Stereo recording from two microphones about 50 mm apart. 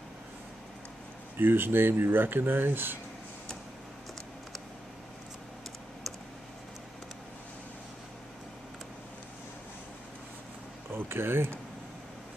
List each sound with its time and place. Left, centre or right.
1.4 s speech: right
10.9 s speech: right